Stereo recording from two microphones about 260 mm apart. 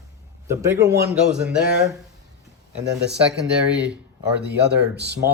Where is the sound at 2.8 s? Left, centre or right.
Right.